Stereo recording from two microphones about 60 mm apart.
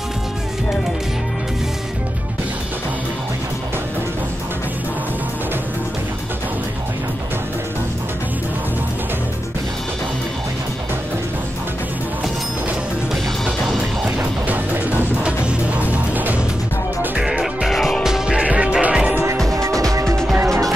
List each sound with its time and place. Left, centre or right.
14.1 s music: right
17.2 s music: centre
17.6 s music: centre
18.0 s music: centre
19.5 s music: right